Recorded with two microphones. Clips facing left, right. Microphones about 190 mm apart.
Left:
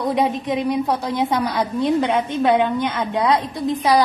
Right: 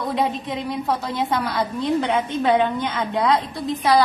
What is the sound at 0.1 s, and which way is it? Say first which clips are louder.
A woman's voice: left 3 dB; 15° left (ahead or behind).